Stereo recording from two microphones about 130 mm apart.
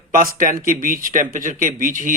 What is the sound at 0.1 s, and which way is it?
Speech, 90° right.